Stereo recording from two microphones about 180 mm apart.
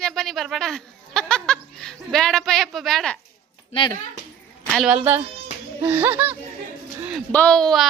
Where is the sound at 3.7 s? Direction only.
30° left (ahead or behind).